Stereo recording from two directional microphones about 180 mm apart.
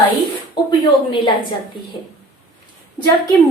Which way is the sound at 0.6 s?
25° left (ahead or behind).